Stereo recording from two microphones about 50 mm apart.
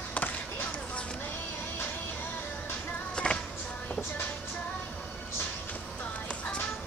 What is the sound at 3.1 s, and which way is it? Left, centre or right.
Music, centre.